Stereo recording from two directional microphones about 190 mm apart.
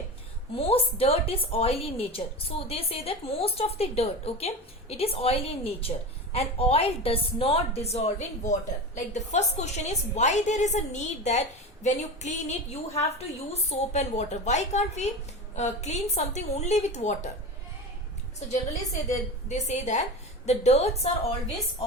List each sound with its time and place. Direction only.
0.5 s a woman's voice: 30° left (ahead or behind)
19.5 s a woman's voice: 35° left (ahead or behind)